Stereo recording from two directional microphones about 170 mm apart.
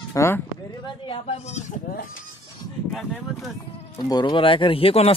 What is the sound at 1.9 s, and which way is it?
Speech, 60° left (ahead or behind).